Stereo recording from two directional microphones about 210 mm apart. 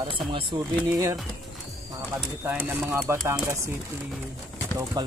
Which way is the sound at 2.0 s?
10° right (ahead or behind).